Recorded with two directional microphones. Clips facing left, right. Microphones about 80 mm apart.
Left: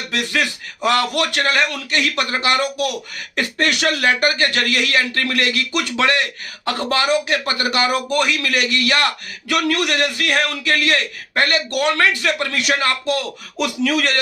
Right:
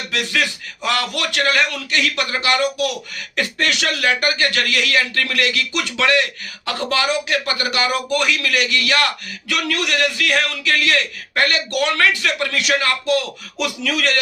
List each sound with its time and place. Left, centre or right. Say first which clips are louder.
0.8 s a man's voice: left 4 dB; left